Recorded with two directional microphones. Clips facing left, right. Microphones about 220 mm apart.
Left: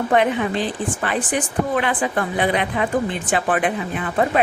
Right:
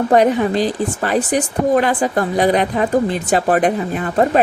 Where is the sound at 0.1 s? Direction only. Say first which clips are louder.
Right 5 dB; 40° right (ahead or behind).